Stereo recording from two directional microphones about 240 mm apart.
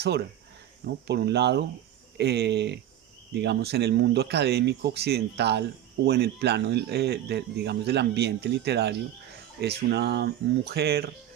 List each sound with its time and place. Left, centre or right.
0.9 s speech: right